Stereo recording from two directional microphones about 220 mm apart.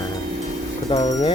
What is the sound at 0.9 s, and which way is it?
Speech, 30° left (ahead or behind).